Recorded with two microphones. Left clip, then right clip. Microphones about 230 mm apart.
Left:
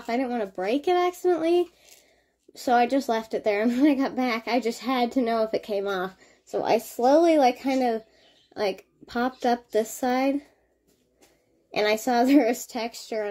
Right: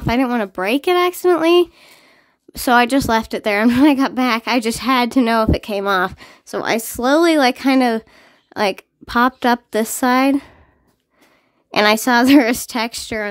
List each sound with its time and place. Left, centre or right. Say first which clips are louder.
0.0 s a woman's voice: right 9 dB; right
11.7 s a woman's voice: right 9 dB; right